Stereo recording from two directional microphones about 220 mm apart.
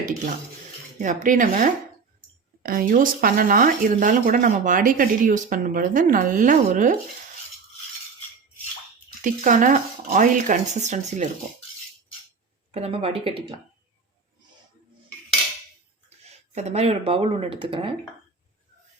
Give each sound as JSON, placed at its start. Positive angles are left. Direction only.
{"t": 0.9, "sound": "speech", "side_deg": -35}
{"t": 9.2, "sound": "speech", "side_deg": -35}
{"t": 12.7, "sound": "speech", "side_deg": -25}
{"t": 16.6, "sound": "speech", "side_deg": -30}